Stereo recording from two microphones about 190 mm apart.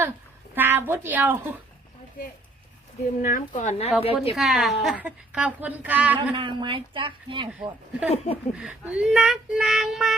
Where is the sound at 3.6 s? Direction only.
35° left (ahead or behind).